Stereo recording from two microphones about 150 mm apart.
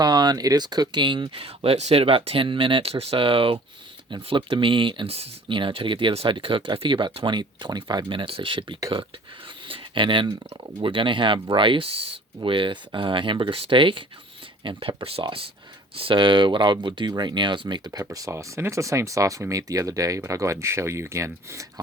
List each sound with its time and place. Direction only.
0.0 s speech: 30° right (ahead or behind)
9.6 s a sound: 35° right (ahead or behind)
10.8 s speech: 35° right (ahead or behind)